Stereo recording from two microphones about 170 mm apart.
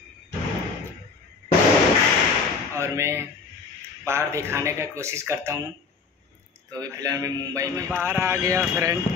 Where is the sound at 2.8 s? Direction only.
15° right (ahead or behind).